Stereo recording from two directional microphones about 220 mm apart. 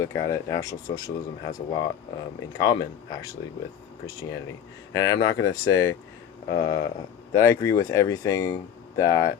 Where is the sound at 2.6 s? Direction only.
20° left (ahead or behind).